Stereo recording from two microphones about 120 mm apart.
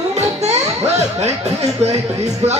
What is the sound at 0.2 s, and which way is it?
Music, 65° right (ahead or behind).